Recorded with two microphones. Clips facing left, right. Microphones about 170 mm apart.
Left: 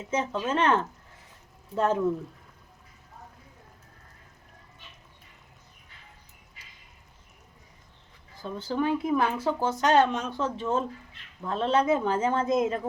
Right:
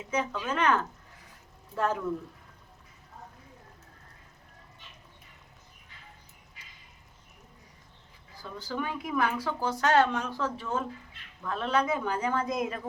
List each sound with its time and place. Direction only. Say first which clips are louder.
0.4 s speech: left 3 dB; 25° left (ahead or behind)
8.4 s speech: left 6 dB; 25° left (ahead or behind)